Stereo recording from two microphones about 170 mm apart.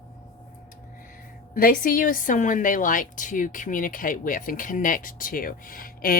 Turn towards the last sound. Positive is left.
turn(degrees=55)  # may be behind; listen again after turning